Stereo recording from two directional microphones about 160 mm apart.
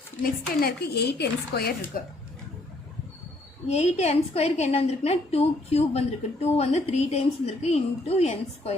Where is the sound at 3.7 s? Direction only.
40° left (ahead or behind).